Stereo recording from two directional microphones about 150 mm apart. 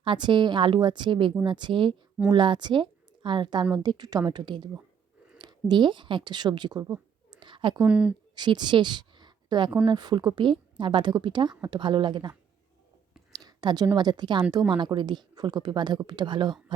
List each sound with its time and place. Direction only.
0.0 s a woman's voice: 35° right (ahead or behind)
7.9 s speech: 5° right (ahead or behind)
8.4 s a woman's voice: 30° right (ahead or behind)
13.3 s a woman's voice: 25° right (ahead or behind)